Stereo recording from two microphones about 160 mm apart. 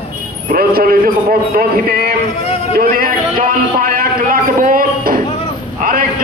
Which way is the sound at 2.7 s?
60° right (ahead or behind).